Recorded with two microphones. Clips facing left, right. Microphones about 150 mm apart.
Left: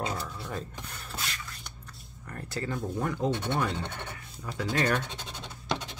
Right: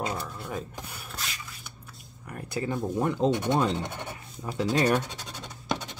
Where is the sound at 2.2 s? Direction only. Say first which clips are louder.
Right 3 dB; 10° right (ahead or behind).